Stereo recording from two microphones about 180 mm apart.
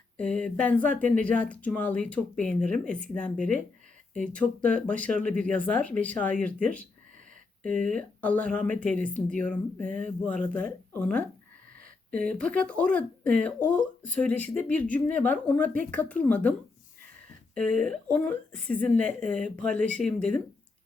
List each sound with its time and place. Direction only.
0.2 s speech: 5° left (ahead or behind)
11.8 s a sound: 50° right (ahead or behind)
12.3 s speech: 5° left (ahead or behind)
17.7 s speech: 5° left (ahead or behind)